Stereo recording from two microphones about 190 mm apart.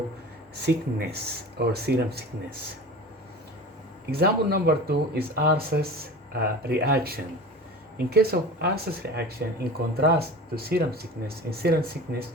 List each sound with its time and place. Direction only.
0.5 s speech: 60° right (ahead or behind)
4.1 s speech: 55° right (ahead or behind)